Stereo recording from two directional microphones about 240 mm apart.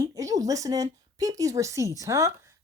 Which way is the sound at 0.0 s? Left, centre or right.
Centre.